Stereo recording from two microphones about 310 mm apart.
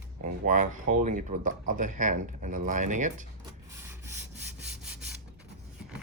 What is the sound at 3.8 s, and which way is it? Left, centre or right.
Wood, centre.